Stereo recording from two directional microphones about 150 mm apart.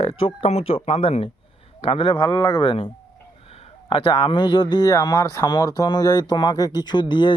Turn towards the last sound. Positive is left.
turn(degrees=30)  # may be behind; listen again after turning